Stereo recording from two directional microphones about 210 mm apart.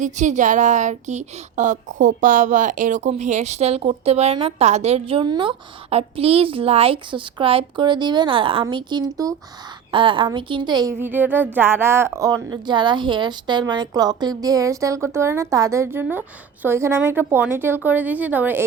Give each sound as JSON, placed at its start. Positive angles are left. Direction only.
{"t": 0.0, "sound": "speech", "side_deg": -35}
{"t": 11.0, "sound": "a woman's voice", "side_deg": -10}